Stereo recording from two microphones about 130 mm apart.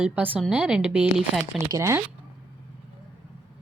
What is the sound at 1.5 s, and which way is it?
Speech, 20° right (ahead or behind).